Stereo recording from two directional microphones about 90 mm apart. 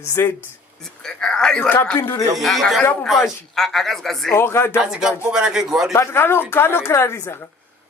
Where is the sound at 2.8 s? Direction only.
20° left (ahead or behind).